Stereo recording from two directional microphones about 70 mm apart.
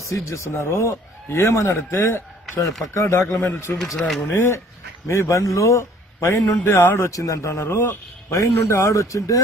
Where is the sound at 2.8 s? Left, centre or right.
Left.